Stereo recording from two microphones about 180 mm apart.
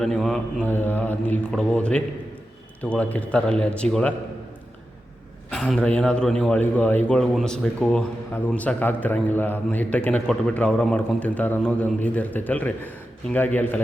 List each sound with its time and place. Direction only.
0.0 s mantra: centre (ahead or behind)
0.7 s a man's voice: 10° left (ahead or behind)
5.5 s a man's voice: 5° left (ahead or behind)